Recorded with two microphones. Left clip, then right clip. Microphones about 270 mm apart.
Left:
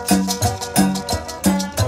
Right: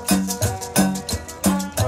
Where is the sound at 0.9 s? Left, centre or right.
Centre.